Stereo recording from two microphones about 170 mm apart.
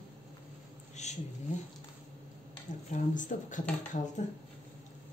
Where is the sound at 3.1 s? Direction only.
50° left (ahead or behind).